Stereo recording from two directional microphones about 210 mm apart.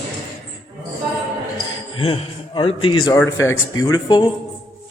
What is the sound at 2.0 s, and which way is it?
A man's voice, 25° left (ahead or behind).